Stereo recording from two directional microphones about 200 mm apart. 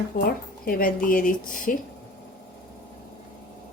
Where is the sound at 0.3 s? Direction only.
45° left (ahead or behind).